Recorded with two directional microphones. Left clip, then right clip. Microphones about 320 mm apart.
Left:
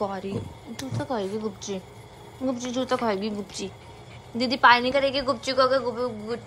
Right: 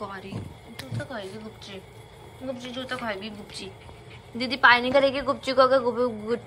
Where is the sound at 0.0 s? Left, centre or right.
Centre.